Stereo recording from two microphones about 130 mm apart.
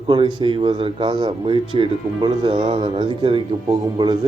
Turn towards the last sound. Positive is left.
turn(degrees=-35)  # may be behind; listen again after turning